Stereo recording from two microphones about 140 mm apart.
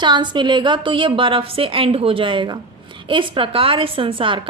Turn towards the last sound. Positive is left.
turn(degrees=-40)  # may be behind; listen again after turning